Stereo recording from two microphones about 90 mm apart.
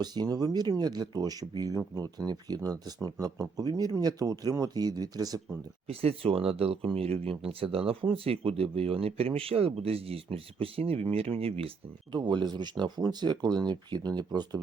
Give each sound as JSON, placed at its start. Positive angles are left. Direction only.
{"t": 0.0, "sound": "speech", "side_deg": -50}
{"t": 5.9, "sound": "speech", "side_deg": -90}
{"t": 12.1, "sound": "speech", "side_deg": -55}